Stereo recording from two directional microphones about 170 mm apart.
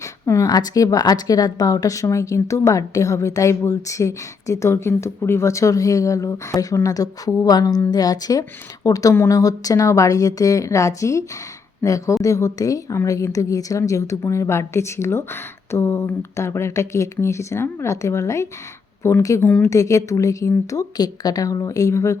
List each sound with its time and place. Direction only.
0.0 s a woman's voice: 20° left (ahead or behind)
19.7 s a woman's voice: 20° left (ahead or behind)